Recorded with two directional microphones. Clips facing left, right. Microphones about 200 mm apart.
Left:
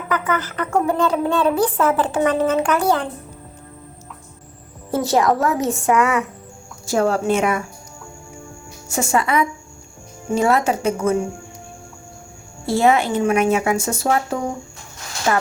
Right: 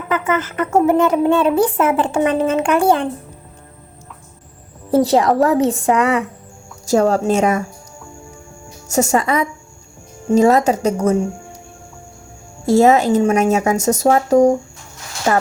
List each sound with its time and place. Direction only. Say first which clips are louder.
0.1 s a woman's voice: right 3 dB; 25° right (ahead or behind)
4.9 s speech: right 4 dB; 30° right (ahead or behind)
8.9 s speech: right 3 dB; 40° right (ahead or behind)
12.6 s speech: right 5 dB; 40° right (ahead or behind)